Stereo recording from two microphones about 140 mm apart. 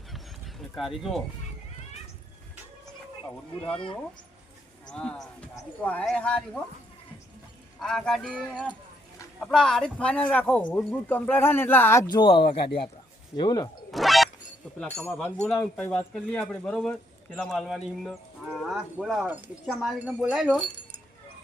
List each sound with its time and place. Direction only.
0.1 s fowl: centre (ahead or behind)
4.9 s speech: 5° left (ahead or behind)
7.8 s speech: 5° left (ahead or behind)
12.0 s speech: 35° left (ahead or behind)
13.9 s a sound: centre (ahead or behind)
14.8 s speech: 10° left (ahead or behind); by 20.6 s 5° right (ahead or behind)